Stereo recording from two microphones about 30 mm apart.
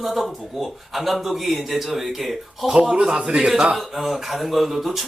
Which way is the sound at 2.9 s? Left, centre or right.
Right.